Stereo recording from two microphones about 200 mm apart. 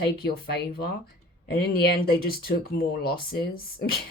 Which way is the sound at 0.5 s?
50° left (ahead or behind).